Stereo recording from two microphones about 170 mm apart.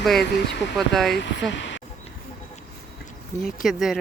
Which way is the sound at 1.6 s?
90° left.